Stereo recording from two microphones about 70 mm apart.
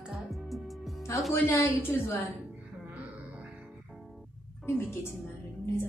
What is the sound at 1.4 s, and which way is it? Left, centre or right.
Speech, left.